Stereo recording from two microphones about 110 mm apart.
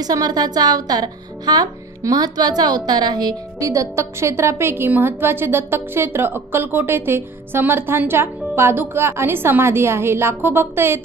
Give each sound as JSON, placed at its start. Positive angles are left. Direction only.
{"t": 0.0, "sound": "speech", "side_deg": -35}